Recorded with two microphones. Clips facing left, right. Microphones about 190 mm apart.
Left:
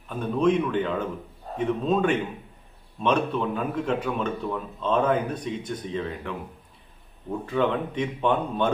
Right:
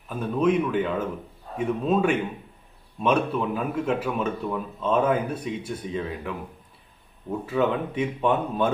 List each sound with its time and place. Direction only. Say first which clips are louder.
0.1 s speech: even; 5° right (ahead or behind)